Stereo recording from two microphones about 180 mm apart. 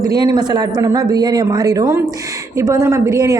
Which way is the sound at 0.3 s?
20° right (ahead or behind).